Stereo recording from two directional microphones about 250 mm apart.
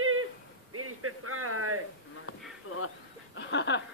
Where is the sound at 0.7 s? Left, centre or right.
Right.